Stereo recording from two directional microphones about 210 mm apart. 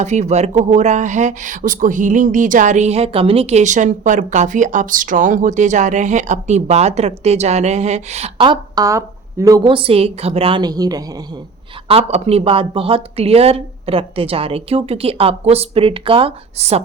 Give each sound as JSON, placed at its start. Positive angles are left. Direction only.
{"t": 0.0, "sound": "speech", "side_deg": -35}
{"t": 11.9, "sound": "speech", "side_deg": -30}